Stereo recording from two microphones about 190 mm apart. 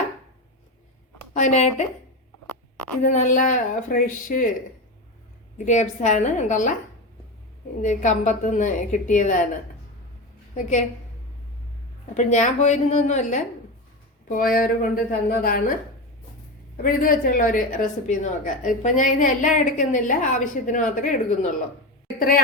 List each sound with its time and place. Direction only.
1.3 s a woman's voice: 35° left (ahead or behind)
3.0 s a woman's voice: 40° left (ahead or behind)
5.6 s a woman's voice: 40° left (ahead or behind)
7.8 s a woman's voice: 40° left (ahead or behind)
10.5 s a woman's voice: 40° left (ahead or behind)
12.1 s a woman's voice: 40° left (ahead or behind)
16.7 s a woman's voice: 45° left (ahead or behind)